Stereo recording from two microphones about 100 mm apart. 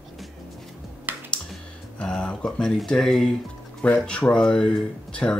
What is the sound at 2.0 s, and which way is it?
Speech, 10° left (ahead or behind).